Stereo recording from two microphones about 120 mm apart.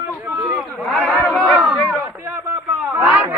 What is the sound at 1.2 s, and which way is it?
Battle cry, 20° left (ahead or behind).